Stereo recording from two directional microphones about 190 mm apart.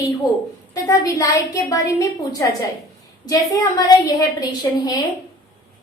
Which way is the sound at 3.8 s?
20° left (ahead or behind).